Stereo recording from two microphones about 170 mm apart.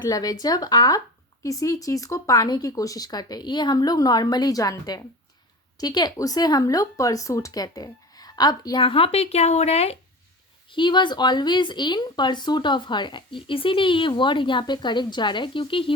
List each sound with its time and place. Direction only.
0.0 s speech: 20° left (ahead or behind)